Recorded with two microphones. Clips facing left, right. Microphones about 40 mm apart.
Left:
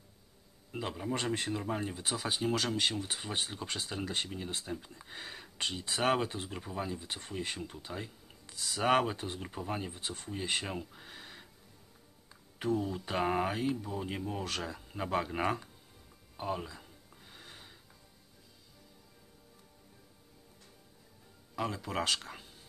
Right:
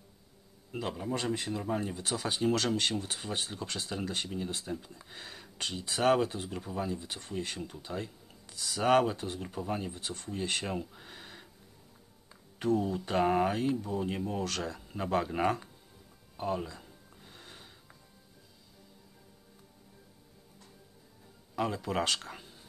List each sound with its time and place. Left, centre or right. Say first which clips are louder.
0.7 s speech: right 2 dB; centre
1.1 s speech: even; left
1.5 s speech: right 2 dB; centre
12.5 s speech: right 3 dB; centre
16.3 s a sound: right 3 dB; centre
21.5 s speech: right 3 dB; centre